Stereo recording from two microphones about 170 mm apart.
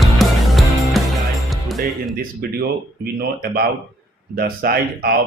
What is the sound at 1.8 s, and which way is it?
Speech, 60° right (ahead or behind).